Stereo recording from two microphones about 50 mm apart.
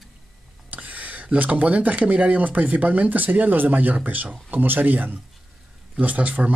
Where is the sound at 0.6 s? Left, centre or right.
Right.